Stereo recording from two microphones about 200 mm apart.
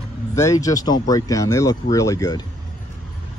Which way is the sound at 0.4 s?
15° left (ahead or behind).